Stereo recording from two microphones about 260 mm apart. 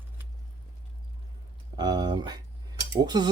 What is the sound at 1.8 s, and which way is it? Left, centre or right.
Speech, centre.